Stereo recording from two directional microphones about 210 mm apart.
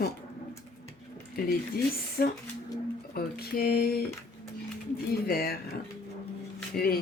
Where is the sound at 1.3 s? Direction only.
45° left (ahead or behind).